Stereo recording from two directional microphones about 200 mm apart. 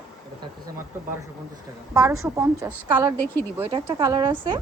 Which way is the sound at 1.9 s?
15° right (ahead or behind).